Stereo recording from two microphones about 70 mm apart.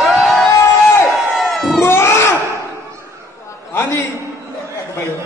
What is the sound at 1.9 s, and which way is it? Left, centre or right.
Speech, left.